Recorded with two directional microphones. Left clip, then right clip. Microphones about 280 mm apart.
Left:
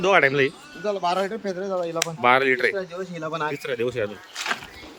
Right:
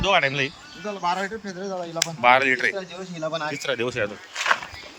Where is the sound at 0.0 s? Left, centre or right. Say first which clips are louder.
Left 3 dB; centre.